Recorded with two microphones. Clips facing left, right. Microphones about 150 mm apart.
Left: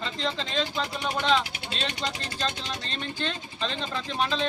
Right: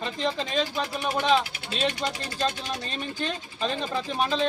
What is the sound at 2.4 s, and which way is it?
Speech, 10° right (ahead or behind).